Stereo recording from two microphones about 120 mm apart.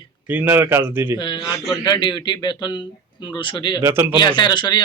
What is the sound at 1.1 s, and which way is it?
Speech, 40° left (ahead or behind).